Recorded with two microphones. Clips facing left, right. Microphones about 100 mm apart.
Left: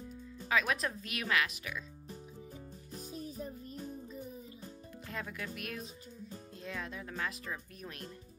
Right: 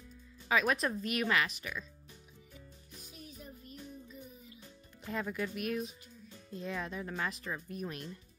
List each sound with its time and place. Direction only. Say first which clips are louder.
0.5 s speech: right 2 dB; centre (ahead or behind)
2.9 s music: left 9 dB; 35° left (ahead or behind)
5.0 s speech: right 6 dB; centre (ahead or behind)